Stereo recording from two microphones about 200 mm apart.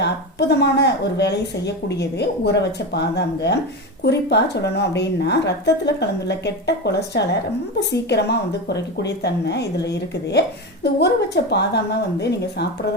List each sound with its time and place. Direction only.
0.0 s speech: 55° left (ahead or behind)